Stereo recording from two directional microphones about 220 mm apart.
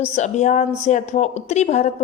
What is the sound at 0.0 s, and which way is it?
A woman's voice, 30° left (ahead or behind).